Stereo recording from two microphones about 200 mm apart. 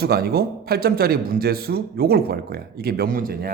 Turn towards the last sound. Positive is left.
turn(degrees=-50)  # may be behind; listen again after turning